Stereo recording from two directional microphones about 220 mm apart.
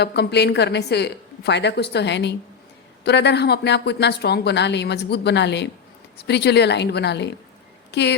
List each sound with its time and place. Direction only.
0.0 s speech: 50° left (ahead or behind)